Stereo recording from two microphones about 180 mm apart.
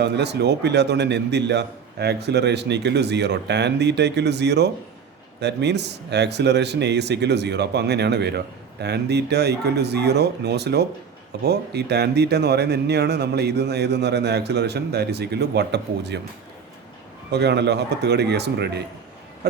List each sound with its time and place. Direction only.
0.0 s speech: 70° right (ahead or behind)
17.3 s speech: 70° right (ahead or behind)